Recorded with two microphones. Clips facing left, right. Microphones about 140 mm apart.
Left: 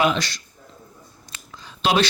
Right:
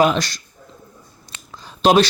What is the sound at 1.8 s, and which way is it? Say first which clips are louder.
Speech: right 6 dB; 40° right (ahead or behind).